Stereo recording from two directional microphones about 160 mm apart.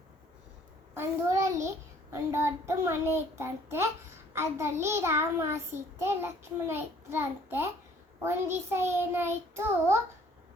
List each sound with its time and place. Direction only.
0.9 s child singing: 20° right (ahead or behind)